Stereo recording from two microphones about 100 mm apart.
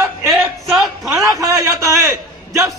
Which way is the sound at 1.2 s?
30° right (ahead or behind).